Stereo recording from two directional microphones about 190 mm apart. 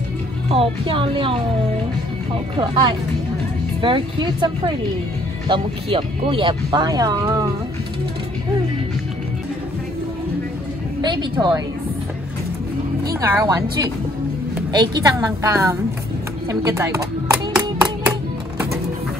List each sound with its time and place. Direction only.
0.5 s speech: 30° right (ahead or behind)
2.5 s speech: 25° right (ahead or behind)
11.0 s speech: 25° right (ahead or behind)
13.0 s a woman's voice: 15° right (ahead or behind)
16.4 s music: 15° right (ahead or behind)